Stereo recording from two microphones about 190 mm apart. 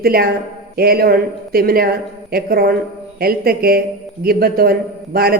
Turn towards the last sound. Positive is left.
turn(degrees=-50)  # may be behind; listen again after turning